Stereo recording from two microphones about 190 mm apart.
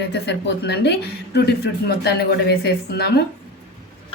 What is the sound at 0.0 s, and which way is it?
A woman's voice, 65° left (ahead or behind).